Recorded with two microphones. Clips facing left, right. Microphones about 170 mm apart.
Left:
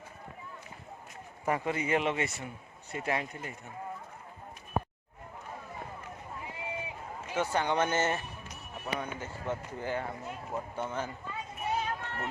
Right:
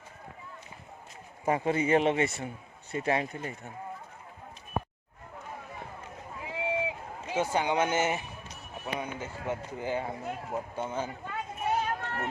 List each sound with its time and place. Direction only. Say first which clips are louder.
1.5 s speech: right 4 dB; 25° right (ahead or behind)
6.4 s run: right 10 dB; 90° right
7.3 s speech: right 2 dB; 15° right (ahead or behind)
11.3 s a sound: right 3 dB; 50° right (ahead or behind)